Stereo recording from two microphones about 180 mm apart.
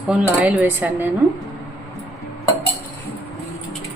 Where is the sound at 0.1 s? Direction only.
5° right (ahead or behind).